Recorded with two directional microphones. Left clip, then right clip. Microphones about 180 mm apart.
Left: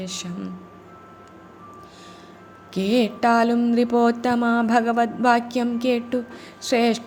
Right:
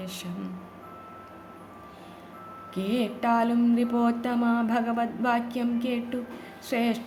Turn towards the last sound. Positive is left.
turn(degrees=25)  # may be behind; listen again after turning